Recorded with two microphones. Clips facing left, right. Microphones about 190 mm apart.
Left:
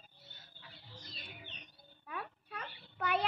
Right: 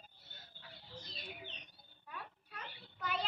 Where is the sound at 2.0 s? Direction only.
65° left (ahead or behind).